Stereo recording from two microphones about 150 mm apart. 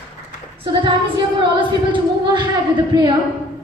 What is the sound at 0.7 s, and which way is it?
Female singing, 35° right (ahead or behind).